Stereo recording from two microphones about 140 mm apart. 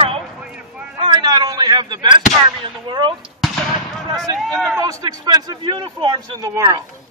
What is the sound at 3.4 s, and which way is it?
Artillery fire, centre (ahead or behind).